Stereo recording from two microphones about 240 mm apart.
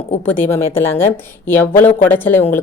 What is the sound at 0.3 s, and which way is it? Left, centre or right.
Speech, centre.